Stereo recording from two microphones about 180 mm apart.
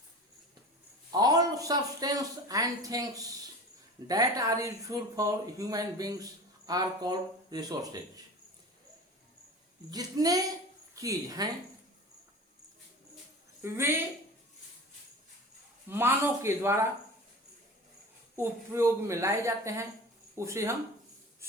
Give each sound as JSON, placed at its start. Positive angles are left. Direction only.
{"t": 1.1, "sound": "speech", "side_deg": -20}
{"t": 9.9, "sound": "speech", "side_deg": -20}
{"t": 13.6, "sound": "a woman's voice", "side_deg": -15}
{"t": 15.9, "sound": "a woman's voice", "side_deg": -15}
{"t": 18.3, "sound": "a woman's voice", "side_deg": -15}